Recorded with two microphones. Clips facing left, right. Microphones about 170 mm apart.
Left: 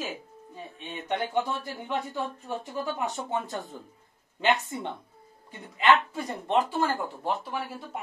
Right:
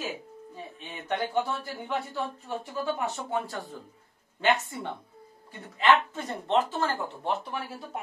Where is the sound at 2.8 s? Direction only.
20° left (ahead or behind).